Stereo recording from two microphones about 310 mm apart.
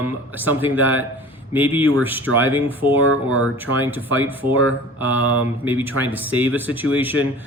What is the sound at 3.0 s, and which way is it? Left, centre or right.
Speech, right.